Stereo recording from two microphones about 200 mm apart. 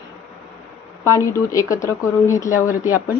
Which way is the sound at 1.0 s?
15° left (ahead or behind).